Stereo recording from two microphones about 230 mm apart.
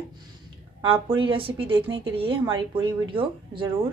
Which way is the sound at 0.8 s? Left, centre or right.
Right.